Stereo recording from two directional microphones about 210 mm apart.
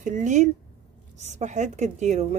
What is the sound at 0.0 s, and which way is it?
A woman's voice, 35° right (ahead or behind).